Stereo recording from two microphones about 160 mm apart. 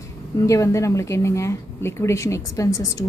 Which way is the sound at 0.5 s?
20° left (ahead or behind).